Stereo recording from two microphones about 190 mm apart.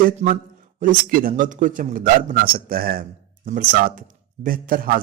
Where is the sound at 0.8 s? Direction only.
50° right (ahead or behind).